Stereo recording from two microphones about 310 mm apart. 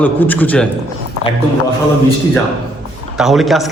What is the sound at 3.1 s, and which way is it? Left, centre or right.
Speech, centre.